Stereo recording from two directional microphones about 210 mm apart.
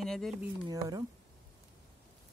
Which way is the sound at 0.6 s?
15° right (ahead or behind).